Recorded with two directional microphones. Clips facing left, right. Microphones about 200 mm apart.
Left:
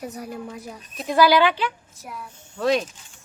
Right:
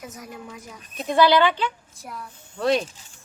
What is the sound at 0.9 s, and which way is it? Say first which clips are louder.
A woman's voice: even; centre (ahead or behind).